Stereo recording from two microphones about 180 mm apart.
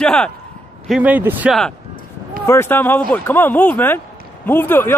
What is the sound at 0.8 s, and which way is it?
Speech, 5° right (ahead or behind).